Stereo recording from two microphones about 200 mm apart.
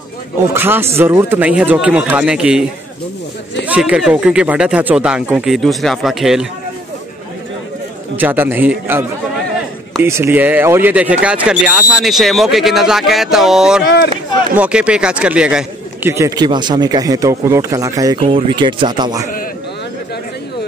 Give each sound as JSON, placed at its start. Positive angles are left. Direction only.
{"t": 0.5, "sound": "speech", "side_deg": -10}
{"t": 3.6, "sound": "speech", "side_deg": -5}
{"t": 8.2, "sound": "speech", "side_deg": -10}
{"t": 10.0, "sound": "speech", "side_deg": -15}
{"t": 13.8, "sound": "speech", "side_deg": 60}
{"t": 14.6, "sound": "speech", "side_deg": -5}